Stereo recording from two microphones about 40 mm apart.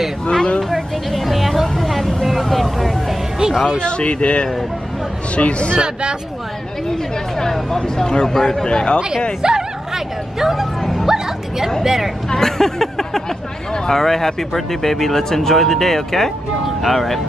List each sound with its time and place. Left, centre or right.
0.6 s a sound: centre
1.7 s vehicle: centre
3.3 s a sound: centre
3.7 s speech: left
7.3 s speech: centre
7.8 s speech: left
8.6 s speech: left
9.4 s music: centre
11.1 s a woman's voice: centre
12.3 s a sound: centre
13.8 s speech: centre